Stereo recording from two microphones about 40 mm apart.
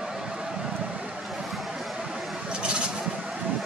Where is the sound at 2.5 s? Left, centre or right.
Right.